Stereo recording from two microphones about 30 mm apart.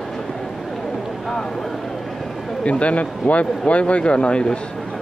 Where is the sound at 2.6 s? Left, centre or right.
Left.